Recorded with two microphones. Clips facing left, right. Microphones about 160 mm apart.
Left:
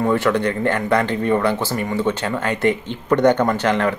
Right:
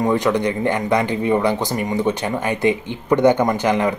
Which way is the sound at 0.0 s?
15° right (ahead or behind).